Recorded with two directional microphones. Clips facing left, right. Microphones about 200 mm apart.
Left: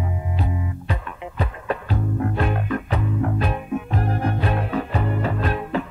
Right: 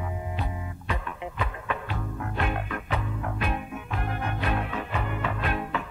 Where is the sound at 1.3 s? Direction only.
35° left (ahead or behind).